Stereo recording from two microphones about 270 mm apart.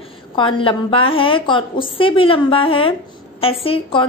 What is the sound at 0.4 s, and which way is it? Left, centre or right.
A woman's voice, centre.